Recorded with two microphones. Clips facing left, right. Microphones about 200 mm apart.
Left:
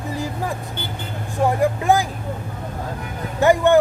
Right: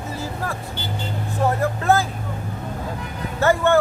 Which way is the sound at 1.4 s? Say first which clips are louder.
Left 2 dB; 15° left (ahead or behind).